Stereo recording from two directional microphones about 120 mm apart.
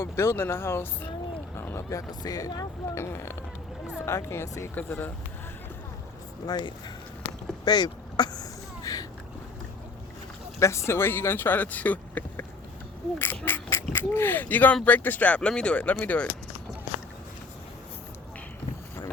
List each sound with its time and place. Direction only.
0.0 s speech: 20° left (ahead or behind)
6.4 s speech: 35° left (ahead or behind)
7.6 s a sound: 35° left (ahead or behind)
10.6 s speech: 25° left (ahead or behind)
13.4 s duck: 20° left (ahead or behind)
13.9 s speech: 20° left (ahead or behind)